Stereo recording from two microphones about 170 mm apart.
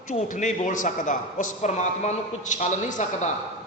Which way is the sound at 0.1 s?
45° left (ahead or behind).